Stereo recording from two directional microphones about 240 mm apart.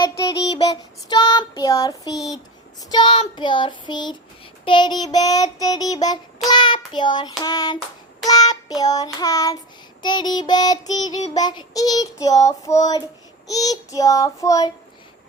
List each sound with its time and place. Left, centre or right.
0.0 s child singing: centre